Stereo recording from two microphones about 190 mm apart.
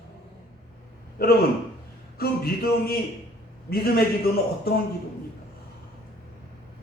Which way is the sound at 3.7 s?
55° left (ahead or behind).